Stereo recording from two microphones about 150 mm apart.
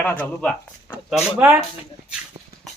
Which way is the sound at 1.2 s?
10° right (ahead or behind).